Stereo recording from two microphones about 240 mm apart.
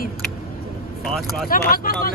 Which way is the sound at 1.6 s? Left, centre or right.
Left.